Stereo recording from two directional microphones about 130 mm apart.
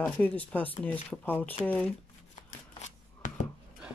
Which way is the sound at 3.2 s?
70° left (ahead or behind).